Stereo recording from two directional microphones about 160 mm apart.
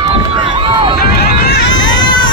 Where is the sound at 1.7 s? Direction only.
25° left (ahead or behind).